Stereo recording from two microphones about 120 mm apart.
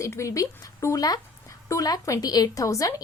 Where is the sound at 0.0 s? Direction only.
25° left (ahead or behind).